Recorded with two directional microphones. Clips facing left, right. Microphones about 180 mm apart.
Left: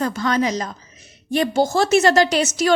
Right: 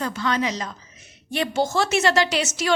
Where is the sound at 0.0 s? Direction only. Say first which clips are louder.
Left 4 dB; 40° left (ahead or behind).